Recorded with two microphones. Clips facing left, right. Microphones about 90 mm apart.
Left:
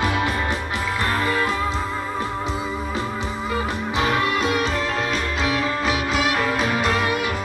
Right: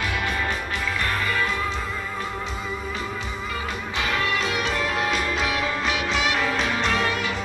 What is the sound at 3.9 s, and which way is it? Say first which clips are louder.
Music: left 5 dB; 25° left (ahead or behind).